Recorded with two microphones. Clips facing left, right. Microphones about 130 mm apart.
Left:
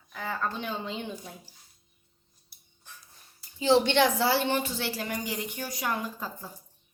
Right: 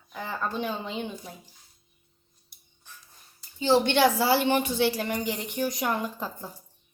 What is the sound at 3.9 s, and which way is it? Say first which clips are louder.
A woman's voice: right 2 dB; 5° right (ahead or behind).